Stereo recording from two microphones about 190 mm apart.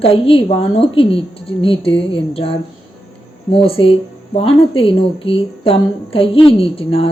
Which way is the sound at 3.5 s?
30° left (ahead or behind).